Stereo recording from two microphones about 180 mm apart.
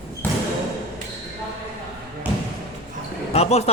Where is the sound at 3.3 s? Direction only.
35° left (ahead or behind).